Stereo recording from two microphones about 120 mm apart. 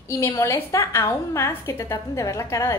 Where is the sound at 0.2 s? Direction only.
25° left (ahead or behind).